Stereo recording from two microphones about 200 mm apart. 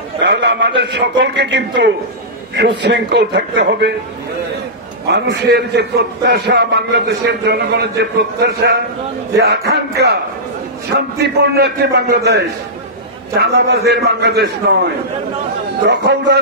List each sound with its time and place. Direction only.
0.2 s a man's voice: 60° right (ahead or behind)
5.0 s a man's voice: 55° right (ahead or behind)
11.1 s a man's voice: 55° right (ahead or behind)